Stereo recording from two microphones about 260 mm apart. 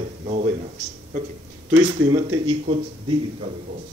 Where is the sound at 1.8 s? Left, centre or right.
Centre.